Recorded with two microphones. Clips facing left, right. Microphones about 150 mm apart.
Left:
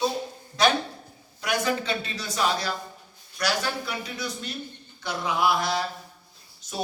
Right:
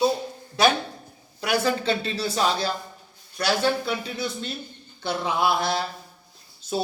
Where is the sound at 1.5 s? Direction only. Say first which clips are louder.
Right 3 dB; 30° right (ahead or behind).